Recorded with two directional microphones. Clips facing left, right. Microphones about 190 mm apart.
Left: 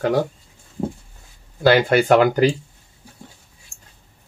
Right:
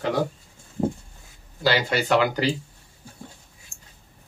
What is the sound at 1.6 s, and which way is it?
Speech, 50° left (ahead or behind).